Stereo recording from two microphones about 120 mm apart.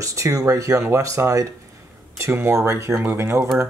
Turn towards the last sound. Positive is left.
turn(degrees=-20)  # may be behind; listen again after turning